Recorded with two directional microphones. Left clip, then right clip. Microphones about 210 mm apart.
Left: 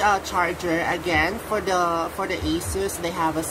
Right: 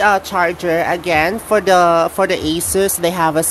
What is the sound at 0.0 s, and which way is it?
Speech, 50° right (ahead or behind).